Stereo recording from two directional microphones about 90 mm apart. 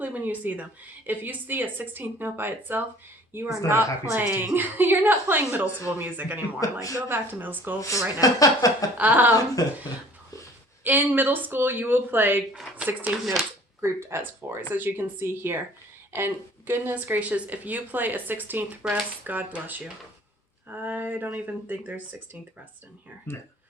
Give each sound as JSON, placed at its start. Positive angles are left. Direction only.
{"t": 0.0, "sound": "speech", "side_deg": -20}
{"t": 6.6, "sound": "speech", "side_deg": 40}
{"t": 7.1, "sound": "speech", "side_deg": -20}
{"t": 7.8, "sound": "speech", "side_deg": 35}
{"t": 9.0, "sound": "speech", "side_deg": -20}
{"t": 9.6, "sound": "speech", "side_deg": 45}
{"t": 10.8, "sound": "speech", "side_deg": -20}
{"t": 13.1, "sound": "speech", "side_deg": -5}
{"t": 13.8, "sound": "speech", "side_deg": -30}
{"t": 23.3, "sound": "speech", "side_deg": 25}